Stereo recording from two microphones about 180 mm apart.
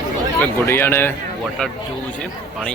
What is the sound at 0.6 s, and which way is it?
Speech, 15° left (ahead or behind).